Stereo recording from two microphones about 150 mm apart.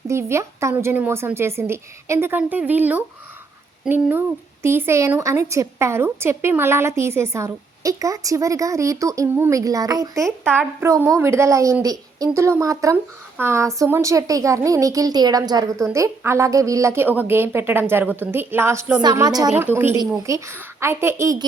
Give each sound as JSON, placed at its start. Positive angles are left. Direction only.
{"t": 0.1, "sound": "a woman's voice", "side_deg": -15}
{"t": 10.5, "sound": "a woman's voice", "side_deg": -15}
{"t": 19.7, "sound": "a woman's voice", "side_deg": -15}